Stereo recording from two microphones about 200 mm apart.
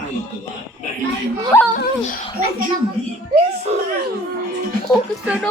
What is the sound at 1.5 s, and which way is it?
Speech, 15° left (ahead or behind).